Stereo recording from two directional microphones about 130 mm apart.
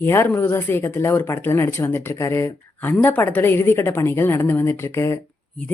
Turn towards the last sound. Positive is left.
turn(degrees=20)  # may be behind; listen again after turning